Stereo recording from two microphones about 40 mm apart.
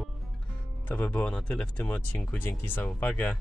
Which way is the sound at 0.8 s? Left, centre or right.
Left.